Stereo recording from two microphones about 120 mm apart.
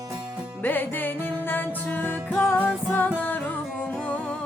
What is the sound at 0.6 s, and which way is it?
Music, 15° left (ahead or behind).